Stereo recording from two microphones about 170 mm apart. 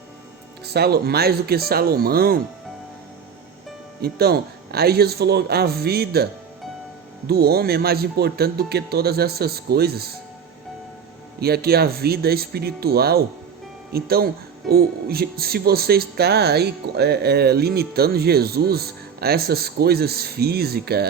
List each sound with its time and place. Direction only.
0.6 s speech: 70° right (ahead or behind)
4.0 s speech: 65° right (ahead or behind)
7.3 s speech: 65° right (ahead or behind)
11.3 s speech: 65° right (ahead or behind)